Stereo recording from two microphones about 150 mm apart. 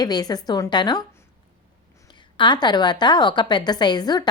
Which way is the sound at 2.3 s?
30° left (ahead or behind).